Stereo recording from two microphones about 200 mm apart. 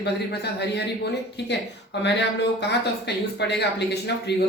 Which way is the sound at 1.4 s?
60° left (ahead or behind).